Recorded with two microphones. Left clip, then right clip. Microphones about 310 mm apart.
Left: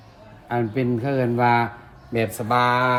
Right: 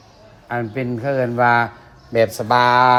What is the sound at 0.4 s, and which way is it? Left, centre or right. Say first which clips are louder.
A woman's voice: even; centre.